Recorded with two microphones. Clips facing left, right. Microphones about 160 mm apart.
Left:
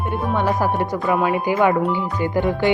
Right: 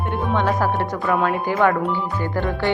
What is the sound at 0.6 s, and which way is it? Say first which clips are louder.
Speech: left 1 dB; 15° left (ahead or behind).